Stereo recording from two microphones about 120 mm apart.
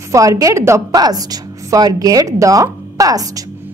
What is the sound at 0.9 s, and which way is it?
A woman's voice, 35° right (ahead or behind).